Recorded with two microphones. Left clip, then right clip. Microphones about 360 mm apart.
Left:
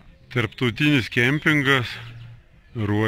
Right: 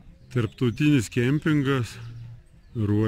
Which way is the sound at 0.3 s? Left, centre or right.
Centre.